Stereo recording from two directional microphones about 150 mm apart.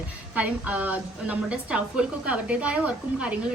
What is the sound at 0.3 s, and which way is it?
Speech, 10° right (ahead or behind).